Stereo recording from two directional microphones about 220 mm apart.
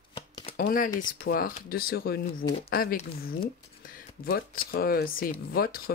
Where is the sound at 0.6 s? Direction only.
40° left (ahead or behind).